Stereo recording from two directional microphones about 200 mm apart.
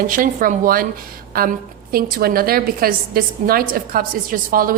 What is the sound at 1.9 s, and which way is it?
A woman's voice, 50° right (ahead or behind).